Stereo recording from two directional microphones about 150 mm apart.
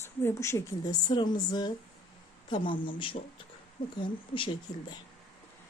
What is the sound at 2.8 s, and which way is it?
Speech, 35° left (ahead or behind).